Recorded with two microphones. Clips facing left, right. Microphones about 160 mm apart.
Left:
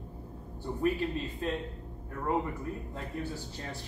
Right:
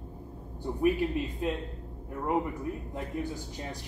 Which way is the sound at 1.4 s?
15° right (ahead or behind).